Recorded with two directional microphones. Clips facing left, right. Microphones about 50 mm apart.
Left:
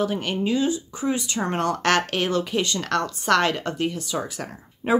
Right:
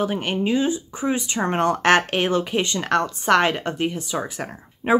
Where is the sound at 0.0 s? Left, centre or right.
Right.